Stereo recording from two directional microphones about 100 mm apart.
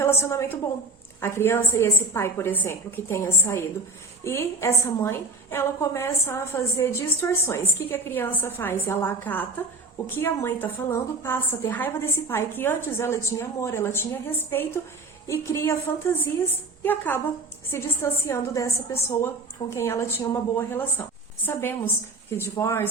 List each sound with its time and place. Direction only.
0.0 s a woman's voice: 25° left (ahead or behind)